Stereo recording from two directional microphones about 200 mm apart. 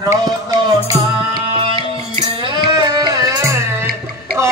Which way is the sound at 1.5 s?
30° right (ahead or behind).